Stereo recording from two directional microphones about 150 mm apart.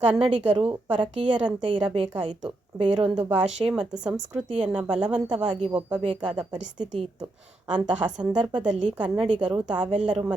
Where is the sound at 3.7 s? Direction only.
5° right (ahead or behind).